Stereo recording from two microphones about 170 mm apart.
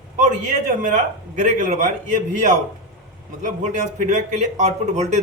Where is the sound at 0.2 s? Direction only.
50° right (ahead or behind).